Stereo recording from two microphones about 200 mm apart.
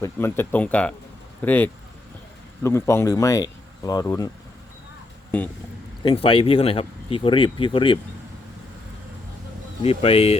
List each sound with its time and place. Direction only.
0.0 s speech: 10° left (ahead or behind)
6.2 s speech: 25° left (ahead or behind)
9.8 s speech: 30° left (ahead or behind)